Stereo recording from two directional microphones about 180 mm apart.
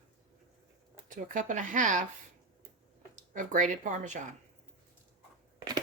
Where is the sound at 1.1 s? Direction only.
45° right (ahead or behind).